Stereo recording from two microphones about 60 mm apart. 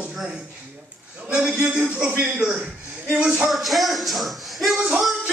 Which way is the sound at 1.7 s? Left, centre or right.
Centre.